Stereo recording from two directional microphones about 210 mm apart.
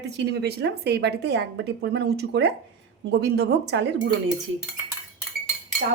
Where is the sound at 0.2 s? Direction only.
50° right (ahead or behind).